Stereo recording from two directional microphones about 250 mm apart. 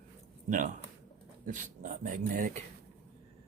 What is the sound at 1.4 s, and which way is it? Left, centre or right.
Speech, right.